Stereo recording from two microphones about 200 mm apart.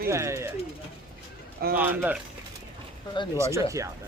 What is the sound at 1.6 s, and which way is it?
Speech, 50° right (ahead or behind).